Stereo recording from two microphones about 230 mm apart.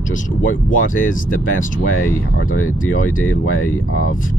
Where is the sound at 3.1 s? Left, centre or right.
Left.